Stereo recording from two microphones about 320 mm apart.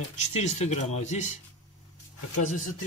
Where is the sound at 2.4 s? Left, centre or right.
Left.